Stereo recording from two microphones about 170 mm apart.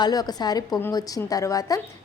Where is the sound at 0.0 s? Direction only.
25° left (ahead or behind).